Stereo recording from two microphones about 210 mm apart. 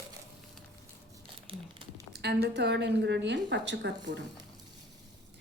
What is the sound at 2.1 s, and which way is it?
A woman's voice, 50° right (ahead or behind).